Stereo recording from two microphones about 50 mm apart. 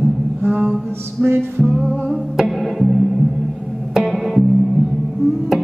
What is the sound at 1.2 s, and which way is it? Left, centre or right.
Music, right.